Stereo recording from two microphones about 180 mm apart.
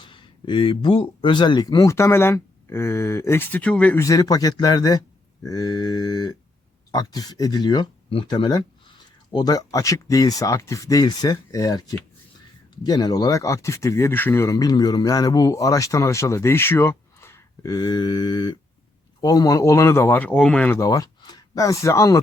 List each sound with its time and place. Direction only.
0.0 s speech: 25° left (ahead or behind)